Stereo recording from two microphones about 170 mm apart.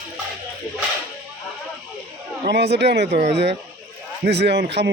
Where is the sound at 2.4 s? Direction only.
80° right.